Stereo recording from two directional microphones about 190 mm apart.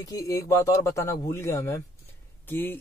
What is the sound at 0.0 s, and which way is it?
Speech, 20° left (ahead or behind).